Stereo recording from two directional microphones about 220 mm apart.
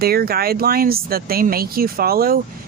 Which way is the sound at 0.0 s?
45° right (ahead or behind).